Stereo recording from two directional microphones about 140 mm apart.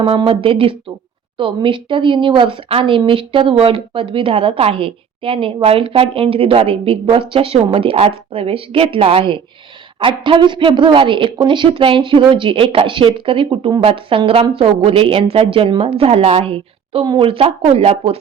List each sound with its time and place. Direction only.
0.0 s a woman's voice: 40° right (ahead or behind)